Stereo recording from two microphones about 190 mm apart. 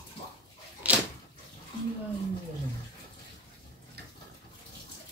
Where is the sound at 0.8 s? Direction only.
5° right (ahead or behind).